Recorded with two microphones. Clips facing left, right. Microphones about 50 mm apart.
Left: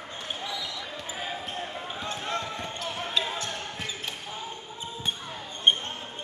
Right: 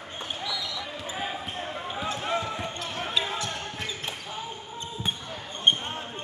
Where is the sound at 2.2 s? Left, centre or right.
Centre.